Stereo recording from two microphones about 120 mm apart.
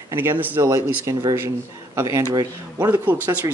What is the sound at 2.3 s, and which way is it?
Speech, 35° right (ahead or behind).